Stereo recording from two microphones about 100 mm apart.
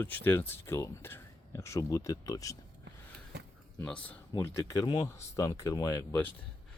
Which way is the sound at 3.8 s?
15° left (ahead or behind).